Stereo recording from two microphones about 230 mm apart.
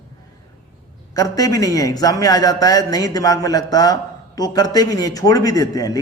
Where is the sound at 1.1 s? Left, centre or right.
Centre.